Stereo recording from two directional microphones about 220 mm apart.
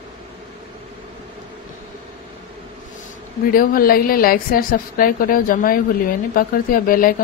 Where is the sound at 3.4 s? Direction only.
40° left (ahead or behind).